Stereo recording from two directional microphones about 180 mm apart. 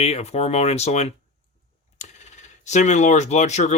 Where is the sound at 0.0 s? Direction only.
35° left (ahead or behind).